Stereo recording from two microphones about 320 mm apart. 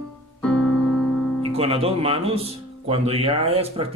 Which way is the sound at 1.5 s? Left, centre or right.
Centre.